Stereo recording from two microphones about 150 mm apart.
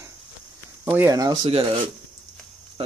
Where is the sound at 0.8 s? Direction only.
15° right (ahead or behind).